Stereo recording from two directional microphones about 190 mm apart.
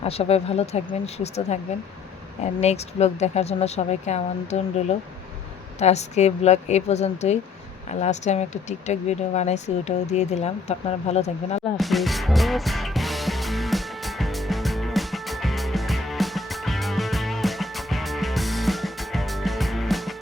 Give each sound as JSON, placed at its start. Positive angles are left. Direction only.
{"t": 0.0, "sound": "speech", "side_deg": 30}
{"t": 11.8, "sound": "music", "side_deg": 0}